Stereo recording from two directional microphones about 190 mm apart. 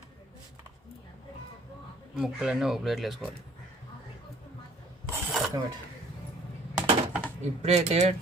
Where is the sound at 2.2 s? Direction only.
5° right (ahead or behind).